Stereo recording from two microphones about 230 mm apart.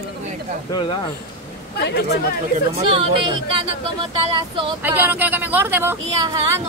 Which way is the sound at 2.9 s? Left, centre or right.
Right.